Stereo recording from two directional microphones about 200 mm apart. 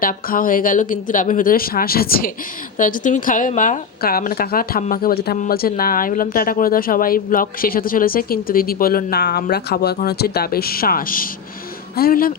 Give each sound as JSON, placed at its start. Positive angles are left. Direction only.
{"t": 0.0, "sound": "speech", "side_deg": 45}